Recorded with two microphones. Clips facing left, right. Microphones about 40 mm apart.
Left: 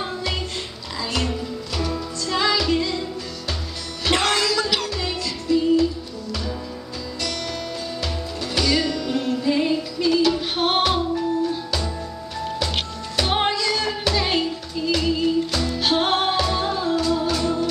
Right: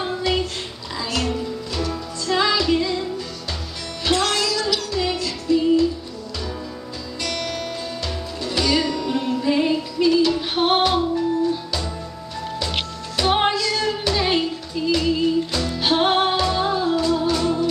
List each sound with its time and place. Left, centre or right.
0.0 s child singing: centre
1.8 s music: centre
4.2 s music: centre
4.9 s music: centre
8.0 s music: centre
8.6 s music: centre
13.1 s music: centre
13.6 s music: left
14.1 s music: centre